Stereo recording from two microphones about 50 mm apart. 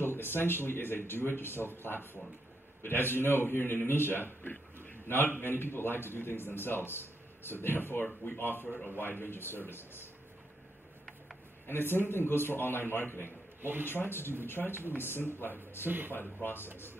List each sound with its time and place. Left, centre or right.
0.0 s a man's voice: left
11.6 s a man's voice: left
13.6 s speech: right
13.8 s a man's voice: left
15.9 s speech: right